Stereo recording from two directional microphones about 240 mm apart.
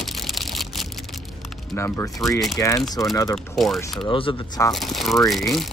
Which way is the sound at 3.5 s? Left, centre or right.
Centre.